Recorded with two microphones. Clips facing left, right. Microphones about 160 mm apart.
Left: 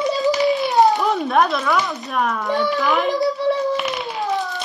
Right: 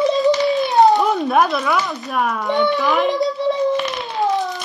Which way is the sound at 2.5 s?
20° right (ahead or behind).